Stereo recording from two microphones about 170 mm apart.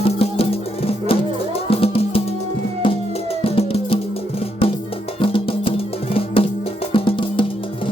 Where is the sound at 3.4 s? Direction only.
35° left (ahead or behind).